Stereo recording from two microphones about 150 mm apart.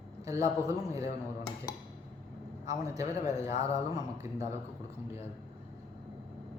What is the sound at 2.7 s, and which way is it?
A man's voice, 20° right (ahead or behind).